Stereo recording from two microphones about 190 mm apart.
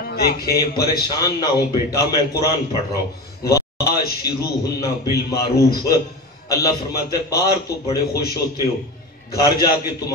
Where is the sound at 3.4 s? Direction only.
15° left (ahead or behind).